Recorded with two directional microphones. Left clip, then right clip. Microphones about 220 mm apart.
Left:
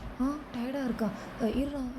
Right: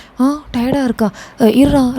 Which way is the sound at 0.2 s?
45° right (ahead or behind).